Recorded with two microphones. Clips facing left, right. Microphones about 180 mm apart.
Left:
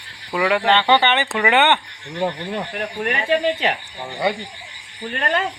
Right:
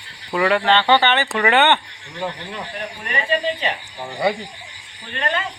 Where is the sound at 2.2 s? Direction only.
40° left (ahead or behind).